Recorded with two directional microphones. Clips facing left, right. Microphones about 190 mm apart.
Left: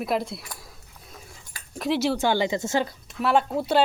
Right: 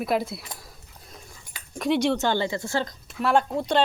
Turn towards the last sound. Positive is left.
turn(degrees=5)  # may be behind; listen again after turning